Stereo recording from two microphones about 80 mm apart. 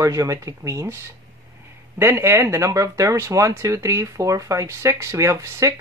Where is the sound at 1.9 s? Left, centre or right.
Right.